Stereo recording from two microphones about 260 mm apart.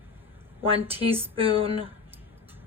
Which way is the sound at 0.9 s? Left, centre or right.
Right.